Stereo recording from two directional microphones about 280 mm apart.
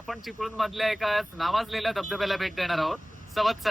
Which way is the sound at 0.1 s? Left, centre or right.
Centre.